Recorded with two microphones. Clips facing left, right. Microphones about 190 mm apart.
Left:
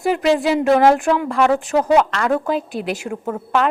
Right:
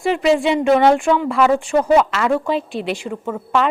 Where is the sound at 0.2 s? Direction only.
Centre (ahead or behind).